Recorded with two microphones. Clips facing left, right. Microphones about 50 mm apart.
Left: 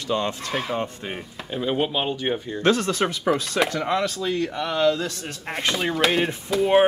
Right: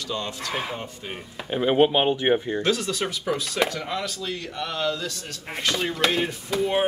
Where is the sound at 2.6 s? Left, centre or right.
Left.